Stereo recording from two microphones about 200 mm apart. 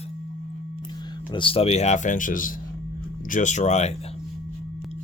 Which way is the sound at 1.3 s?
25° left (ahead or behind).